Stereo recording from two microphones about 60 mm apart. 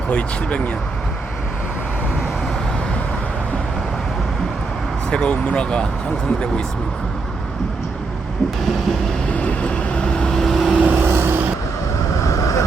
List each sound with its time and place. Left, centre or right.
0.1 s speech: left
5.1 s speech: centre
9.4 s vehicle: centre
10.7 s vehicle: centre
11.0 s vehicle: right
12.2 s vehicle: left